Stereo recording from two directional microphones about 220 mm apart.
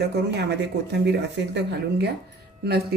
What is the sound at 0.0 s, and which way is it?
Speech, 50° right (ahead or behind).